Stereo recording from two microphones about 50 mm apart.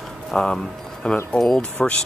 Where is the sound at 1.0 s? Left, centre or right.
Centre.